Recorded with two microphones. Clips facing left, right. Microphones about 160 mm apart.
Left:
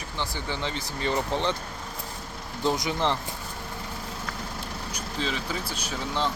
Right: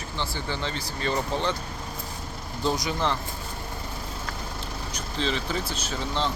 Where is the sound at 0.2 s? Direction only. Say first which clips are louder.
Even; 15° left (ahead or behind).